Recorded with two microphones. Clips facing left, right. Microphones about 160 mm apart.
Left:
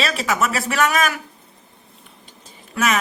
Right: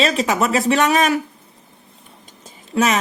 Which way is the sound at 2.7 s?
30° right (ahead or behind).